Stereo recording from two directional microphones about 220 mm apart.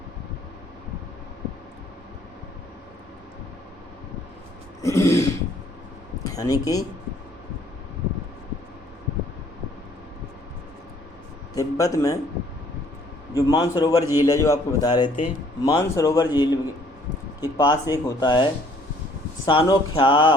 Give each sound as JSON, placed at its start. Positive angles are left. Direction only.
{"t": 4.8, "sound": "speech", "side_deg": 15}
{"t": 11.5, "sound": "speech", "side_deg": 15}
{"t": 13.3, "sound": "speech", "side_deg": 20}
{"t": 19.5, "sound": "speech", "side_deg": 25}